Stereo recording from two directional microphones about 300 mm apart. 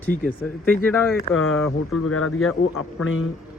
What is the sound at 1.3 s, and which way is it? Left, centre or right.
Speech, left.